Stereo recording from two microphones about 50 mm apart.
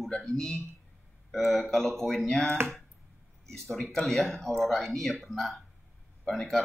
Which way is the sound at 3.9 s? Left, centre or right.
Centre.